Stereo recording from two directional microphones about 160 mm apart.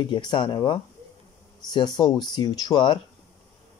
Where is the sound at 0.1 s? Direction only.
30° left (ahead or behind).